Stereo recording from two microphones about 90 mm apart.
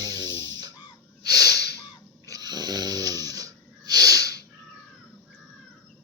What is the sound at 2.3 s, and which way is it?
Snoring, 50° right (ahead or behind).